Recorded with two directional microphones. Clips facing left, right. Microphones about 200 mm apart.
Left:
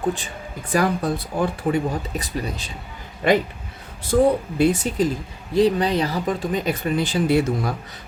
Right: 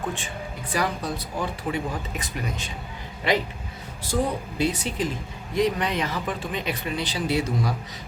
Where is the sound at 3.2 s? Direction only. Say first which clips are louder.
Left 6 dB; 50° left (ahead or behind).